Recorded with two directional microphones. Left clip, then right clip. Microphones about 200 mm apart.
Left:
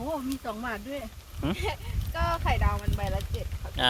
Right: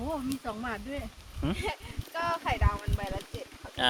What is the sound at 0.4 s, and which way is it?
Speech, 40° left (ahead or behind).